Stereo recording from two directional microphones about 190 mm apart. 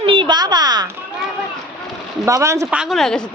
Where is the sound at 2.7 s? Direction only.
Centre (ahead or behind).